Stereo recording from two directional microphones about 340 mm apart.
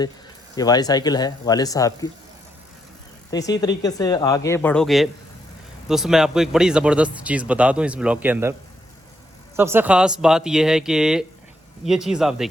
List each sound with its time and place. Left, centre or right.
0.5 s speech: centre
3.2 s speech: centre
9.6 s speech: centre